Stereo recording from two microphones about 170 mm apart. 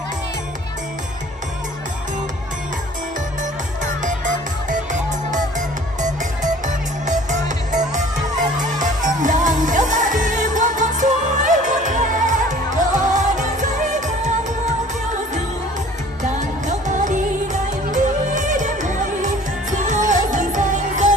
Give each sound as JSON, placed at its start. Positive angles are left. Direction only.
{"t": 3.8, "sound": "music", "side_deg": -50}
{"t": 7.1, "sound": "music", "side_deg": -45}
{"t": 16.3, "sound": "music", "side_deg": -45}